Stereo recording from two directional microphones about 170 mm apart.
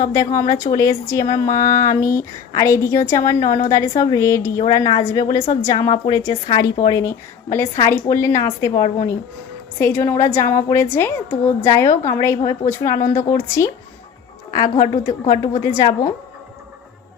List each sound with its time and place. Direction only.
0.0 s a woman's voice: 20° left (ahead or behind)